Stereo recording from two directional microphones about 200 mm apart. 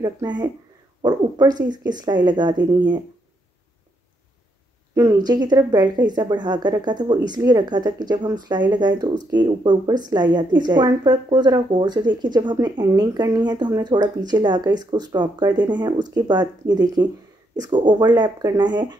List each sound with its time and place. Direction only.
0.0 s a woman's voice: 20° right (ahead or behind)
1.7 s a woman's voice: 20° right (ahead or behind)
4.9 s a woman's voice: 20° right (ahead or behind)